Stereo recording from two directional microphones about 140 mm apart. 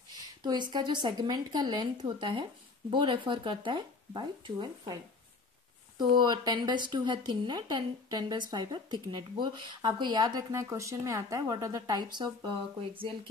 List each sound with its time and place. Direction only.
0.4 s speech: 30° right (ahead or behind)
5.9 s speech: 30° right (ahead or behind)